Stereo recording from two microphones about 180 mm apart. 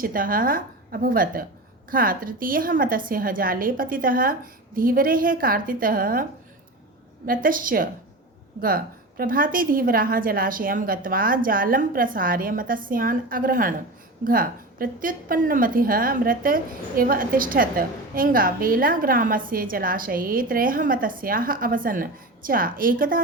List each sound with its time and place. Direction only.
0.0 s a woman's voice: 50° right (ahead or behind)
7.3 s a woman's voice: 50° right (ahead or behind)